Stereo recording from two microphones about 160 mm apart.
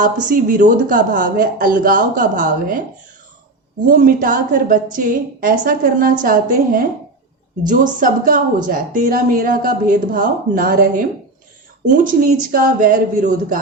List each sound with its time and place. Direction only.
0.3 s a woman's voice: 55° right (ahead or behind)
3.8 s a woman's voice: 60° right (ahead or behind)